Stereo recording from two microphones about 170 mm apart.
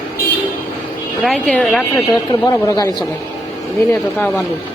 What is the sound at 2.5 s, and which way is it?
Speech, 20° left (ahead or behind).